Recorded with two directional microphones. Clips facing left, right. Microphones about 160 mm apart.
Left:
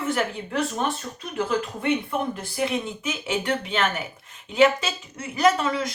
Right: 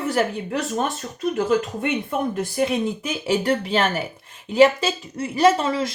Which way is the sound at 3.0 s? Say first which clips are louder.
Right 5 dB; 35° right (ahead or behind).